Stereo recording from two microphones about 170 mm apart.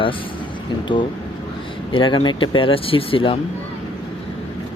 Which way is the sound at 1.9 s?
30° left (ahead or behind).